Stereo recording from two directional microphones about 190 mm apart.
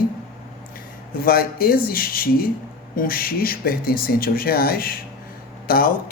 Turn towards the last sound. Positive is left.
turn(degrees=50)  # may be behind; listen again after turning